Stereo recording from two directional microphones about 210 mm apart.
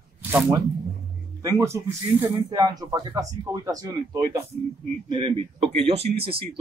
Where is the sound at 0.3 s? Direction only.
10° right (ahead or behind).